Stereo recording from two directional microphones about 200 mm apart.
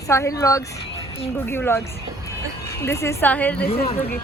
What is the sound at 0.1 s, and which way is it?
A woman's voice, 15° left (ahead or behind).